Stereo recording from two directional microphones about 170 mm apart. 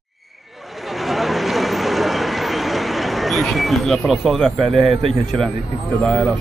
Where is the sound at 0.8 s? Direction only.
Centre (ahead or behind).